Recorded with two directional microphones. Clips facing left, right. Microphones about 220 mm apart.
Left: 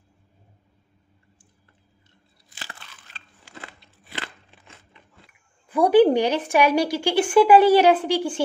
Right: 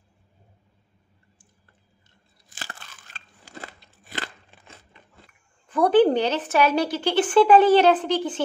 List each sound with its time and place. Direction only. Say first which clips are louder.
2.5 s crunch: right 2 dB; 45° right (ahead or behind)
5.7 s a woman's voice: left 2 dB; 10° left (ahead or behind)